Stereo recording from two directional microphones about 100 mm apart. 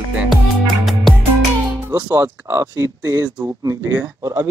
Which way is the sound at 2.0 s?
20° right (ahead or behind).